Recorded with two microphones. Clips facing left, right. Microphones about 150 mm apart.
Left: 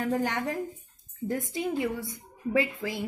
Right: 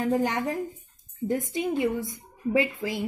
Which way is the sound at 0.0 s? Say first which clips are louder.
Right 3 dB; 20° right (ahead or behind).